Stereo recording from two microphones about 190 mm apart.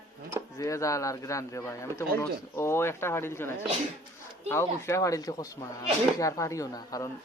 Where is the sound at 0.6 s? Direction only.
15° left (ahead or behind).